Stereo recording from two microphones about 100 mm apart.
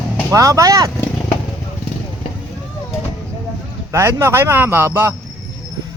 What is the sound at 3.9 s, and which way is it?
A man's voice, 30° right (ahead or behind).